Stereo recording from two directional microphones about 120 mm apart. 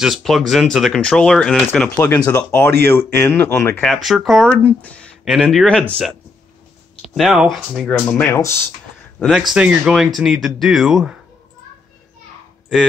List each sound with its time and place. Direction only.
0.0 s speech: centre (ahead or behind)
2.2 s speech: 25° left (ahead or behind)
3.8 s speech: centre (ahead or behind)
4.5 s speech: 15° left (ahead or behind)
5.2 s speech: centre (ahead or behind)
8.1 s speech: 15° left (ahead or behind)
9.5 s speech: 10° right (ahead or behind)